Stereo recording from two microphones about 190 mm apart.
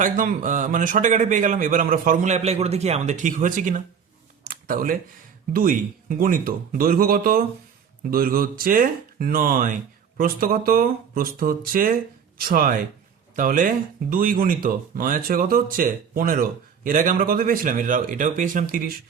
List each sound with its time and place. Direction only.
0.0 s speech: 45° right (ahead or behind)
4.4 s a sound: 50° right (ahead or behind)
5.5 s speech: 50° right (ahead or behind)